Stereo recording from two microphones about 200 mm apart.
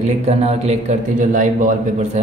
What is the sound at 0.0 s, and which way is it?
A man's voice, 30° right (ahead or behind).